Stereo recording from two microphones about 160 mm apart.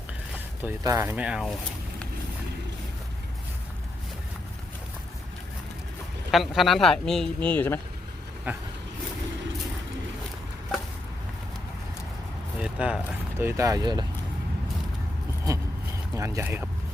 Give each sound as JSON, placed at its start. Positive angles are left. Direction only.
{"t": 0.3, "sound": "speech", "side_deg": -15}
{"t": 6.3, "sound": "speech", "side_deg": 0}
{"t": 8.5, "sound": "speech", "side_deg": -10}
{"t": 12.5, "sound": "a sound", "side_deg": -5}
{"t": 13.4, "sound": "speech", "side_deg": -15}
{"t": 16.1, "sound": "speech", "side_deg": -20}